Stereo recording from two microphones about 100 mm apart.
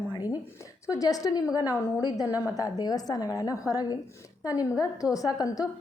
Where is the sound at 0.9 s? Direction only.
35° left (ahead or behind).